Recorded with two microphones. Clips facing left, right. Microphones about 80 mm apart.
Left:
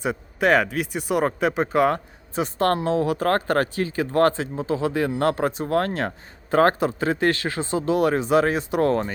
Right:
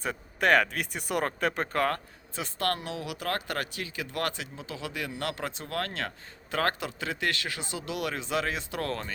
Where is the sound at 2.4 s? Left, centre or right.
Left.